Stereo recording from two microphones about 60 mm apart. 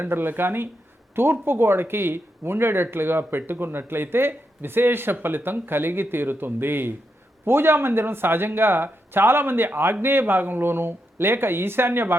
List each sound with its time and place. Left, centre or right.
0.0 s speech: right